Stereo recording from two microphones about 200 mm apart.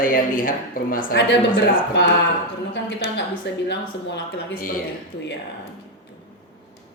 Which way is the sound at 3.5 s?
60° left (ahead or behind).